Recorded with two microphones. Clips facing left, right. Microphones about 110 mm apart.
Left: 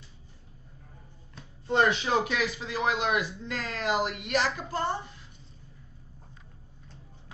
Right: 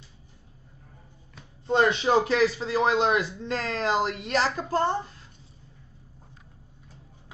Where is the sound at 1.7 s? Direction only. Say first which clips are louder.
Right 3 dB; 30° right (ahead or behind).